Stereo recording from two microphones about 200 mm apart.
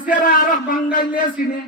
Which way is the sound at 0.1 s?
45° left (ahead or behind).